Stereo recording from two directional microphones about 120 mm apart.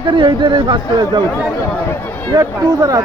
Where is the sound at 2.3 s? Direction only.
35° right (ahead or behind).